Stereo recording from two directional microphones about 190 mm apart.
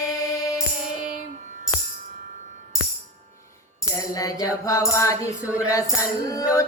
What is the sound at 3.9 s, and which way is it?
Female singing, 20° left (ahead or behind).